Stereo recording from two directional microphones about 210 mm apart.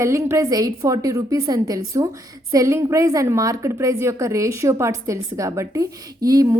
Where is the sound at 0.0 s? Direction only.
15° right (ahead or behind).